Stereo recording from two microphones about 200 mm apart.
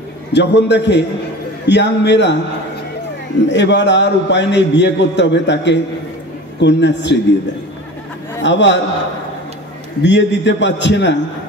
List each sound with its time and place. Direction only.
0.3 s a man's voice: 60° left (ahead or behind)
3.4 s a man's voice: 60° left (ahead or behind)
8.4 s a man's voice: 60° left (ahead or behind)
10.0 s a man's voice: 60° left (ahead or behind)